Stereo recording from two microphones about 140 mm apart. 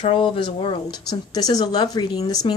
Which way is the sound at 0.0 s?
40° left (ahead or behind).